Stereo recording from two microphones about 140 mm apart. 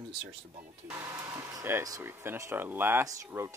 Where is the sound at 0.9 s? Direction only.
20° right (ahead or behind).